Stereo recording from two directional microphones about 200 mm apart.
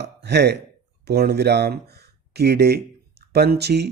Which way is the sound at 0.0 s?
55° right (ahead or behind).